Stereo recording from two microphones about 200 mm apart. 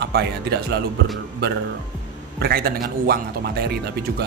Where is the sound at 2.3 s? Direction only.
50° right (ahead or behind).